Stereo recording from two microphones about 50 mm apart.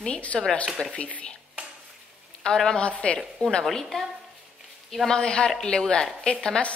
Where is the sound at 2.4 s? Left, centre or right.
Centre.